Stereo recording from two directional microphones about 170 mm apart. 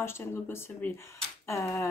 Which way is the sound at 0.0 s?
15° left (ahead or behind).